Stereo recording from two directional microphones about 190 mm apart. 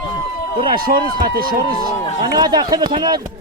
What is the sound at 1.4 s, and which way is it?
Speech, 50° right (ahead or behind).